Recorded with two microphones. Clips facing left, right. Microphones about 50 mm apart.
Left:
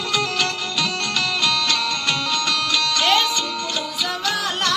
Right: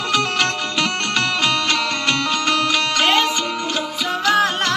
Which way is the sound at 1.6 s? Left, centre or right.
Right.